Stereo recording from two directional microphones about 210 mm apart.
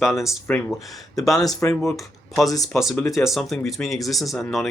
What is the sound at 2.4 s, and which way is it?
Speech, 15° left (ahead or behind).